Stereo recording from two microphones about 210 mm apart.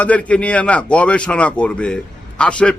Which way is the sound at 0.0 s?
5° left (ahead or behind).